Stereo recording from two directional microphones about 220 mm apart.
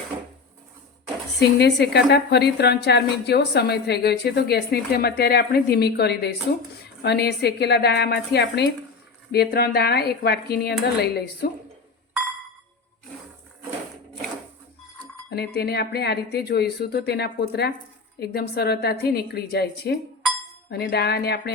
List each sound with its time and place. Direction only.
1.4 s a woman's voice: 50° left (ahead or behind)
15.3 s a woman's voice: 45° left (ahead or behind)